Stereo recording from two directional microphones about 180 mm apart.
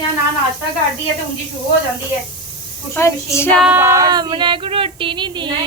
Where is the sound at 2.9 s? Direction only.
15° left (ahead or behind).